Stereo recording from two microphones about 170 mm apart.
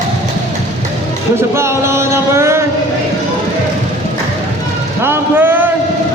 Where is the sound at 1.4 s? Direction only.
15° right (ahead or behind).